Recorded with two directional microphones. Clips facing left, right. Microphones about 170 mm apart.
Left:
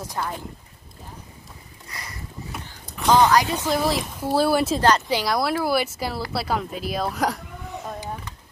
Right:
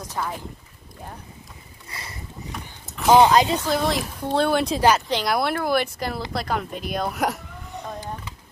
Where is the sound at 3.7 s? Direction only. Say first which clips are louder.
Even; centre (ahead or behind).